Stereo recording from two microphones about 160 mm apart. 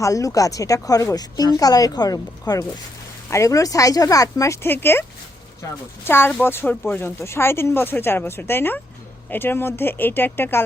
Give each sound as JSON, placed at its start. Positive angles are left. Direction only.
{"t": 0.0, "sound": "speech", "side_deg": 20}